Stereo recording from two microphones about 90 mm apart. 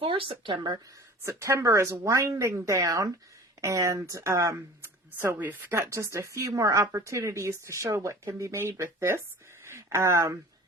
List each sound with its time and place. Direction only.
0.0 s speech: 75° right (ahead or behind)
1.2 s speech: 30° right (ahead or behind)
9.6 s a sound: 30° right (ahead or behind)